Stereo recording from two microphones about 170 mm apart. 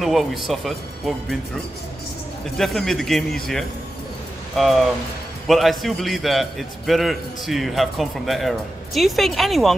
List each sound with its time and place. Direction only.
0.0 s a man's voice: centre (ahead or behind)
2.5 s a man's voice: centre (ahead or behind)
4.6 s a man's voice: centre (ahead or behind)